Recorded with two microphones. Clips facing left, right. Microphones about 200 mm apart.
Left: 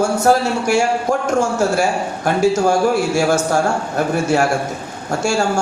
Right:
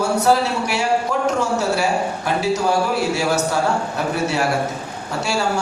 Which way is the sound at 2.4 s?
50° left (ahead or behind).